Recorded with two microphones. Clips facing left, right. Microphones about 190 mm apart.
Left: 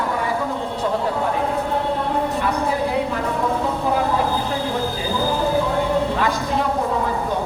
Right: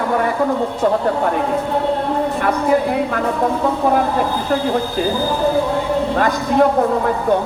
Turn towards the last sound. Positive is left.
turn(degrees=-45)  # may be behind; listen again after turning